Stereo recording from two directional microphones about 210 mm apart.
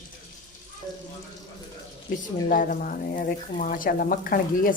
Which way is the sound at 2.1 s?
40° left (ahead or behind).